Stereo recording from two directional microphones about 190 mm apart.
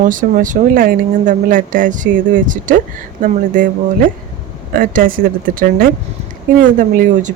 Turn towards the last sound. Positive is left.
turn(degrees=-45)  # may be behind; listen again after turning